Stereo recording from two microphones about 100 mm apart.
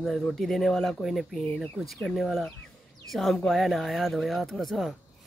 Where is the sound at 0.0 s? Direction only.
Centre (ahead or behind).